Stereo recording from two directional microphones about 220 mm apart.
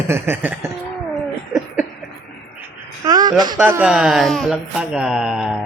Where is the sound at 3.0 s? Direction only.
20° right (ahead or behind).